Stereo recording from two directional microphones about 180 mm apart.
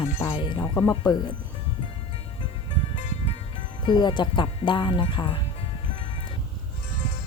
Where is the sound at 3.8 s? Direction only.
25° left (ahead or behind).